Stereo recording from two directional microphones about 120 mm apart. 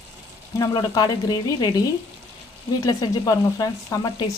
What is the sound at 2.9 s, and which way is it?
Speech, 30° left (ahead or behind).